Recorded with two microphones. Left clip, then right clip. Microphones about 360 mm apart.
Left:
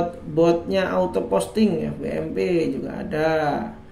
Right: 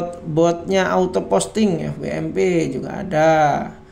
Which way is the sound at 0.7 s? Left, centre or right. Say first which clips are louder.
Right 4 dB; right.